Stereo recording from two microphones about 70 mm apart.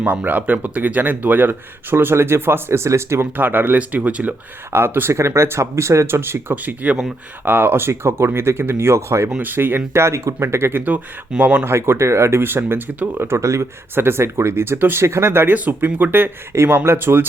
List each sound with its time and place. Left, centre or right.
0.0 s speech: right
3.3 s speech: right
4.7 s speech: right
9.4 s speech: right
11.6 s speech: right
13.9 s speech: right
16.5 s speech: right